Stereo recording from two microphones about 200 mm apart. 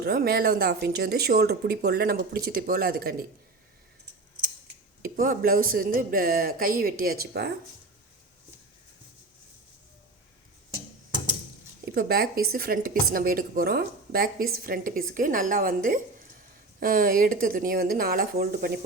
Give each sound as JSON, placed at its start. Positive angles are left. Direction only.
{"t": 0.0, "sound": "speech", "side_deg": -50}
{"t": 5.0, "sound": "speech", "side_deg": -45}
{"t": 11.9, "sound": "speech", "side_deg": -50}